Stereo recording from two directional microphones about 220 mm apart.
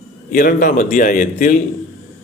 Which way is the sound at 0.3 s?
40° left (ahead or behind).